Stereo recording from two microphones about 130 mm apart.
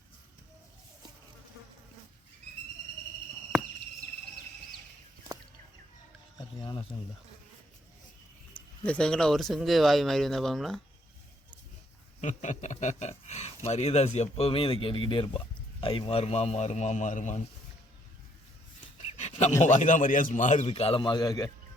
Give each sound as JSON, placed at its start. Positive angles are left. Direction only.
{"t": 6.6, "sound": "speech", "side_deg": 40}
{"t": 8.8, "sound": "speech", "side_deg": 10}
{"t": 12.2, "sound": "a man's voice", "side_deg": 70}
{"t": 19.1, "sound": "a sound", "side_deg": 65}
{"t": 19.6, "sound": "a man's voice", "side_deg": 70}